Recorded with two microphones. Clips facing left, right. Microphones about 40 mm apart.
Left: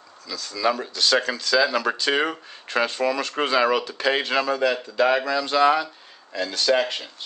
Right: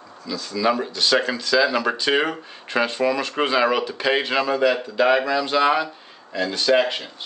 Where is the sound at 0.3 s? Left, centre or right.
Right.